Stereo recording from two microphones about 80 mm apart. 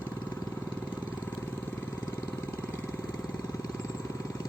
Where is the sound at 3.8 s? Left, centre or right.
Left.